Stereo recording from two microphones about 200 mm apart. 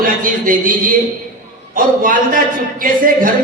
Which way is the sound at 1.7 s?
45° right (ahead or behind).